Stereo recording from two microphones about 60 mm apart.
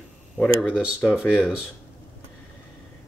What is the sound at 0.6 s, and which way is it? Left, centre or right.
Speech, centre.